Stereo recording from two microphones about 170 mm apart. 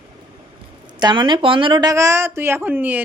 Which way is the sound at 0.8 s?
25° right (ahead or behind).